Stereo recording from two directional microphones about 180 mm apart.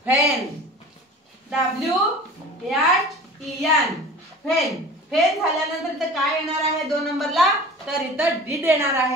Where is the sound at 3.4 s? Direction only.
Centre (ahead or behind).